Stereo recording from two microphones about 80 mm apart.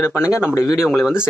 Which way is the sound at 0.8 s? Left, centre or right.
Centre.